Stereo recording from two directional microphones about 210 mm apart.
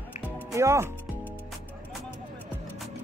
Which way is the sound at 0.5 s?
15° right (ahead or behind).